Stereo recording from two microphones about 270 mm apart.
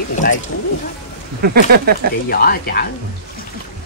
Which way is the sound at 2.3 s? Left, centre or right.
Left.